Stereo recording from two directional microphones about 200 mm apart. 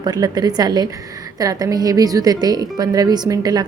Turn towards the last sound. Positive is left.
turn(degrees=-20)  # may be behind; listen again after turning